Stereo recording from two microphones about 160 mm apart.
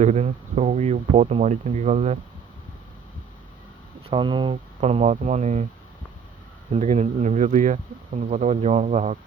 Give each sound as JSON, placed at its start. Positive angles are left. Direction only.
{"t": 0.0, "sound": "speech", "side_deg": -45}
{"t": 4.1, "sound": "speech", "side_deg": -30}
{"t": 6.7, "sound": "speech", "side_deg": -45}